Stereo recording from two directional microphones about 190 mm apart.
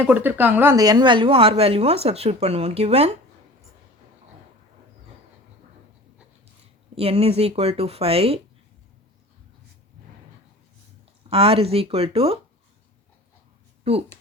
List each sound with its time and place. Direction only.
0.0 s speech: 10° right (ahead or behind); by 3.1 s 35° right (ahead or behind)
6.9 s speech: 30° right (ahead or behind)
11.3 s speech: 30° right (ahead or behind)
13.9 s speech: 30° right (ahead or behind)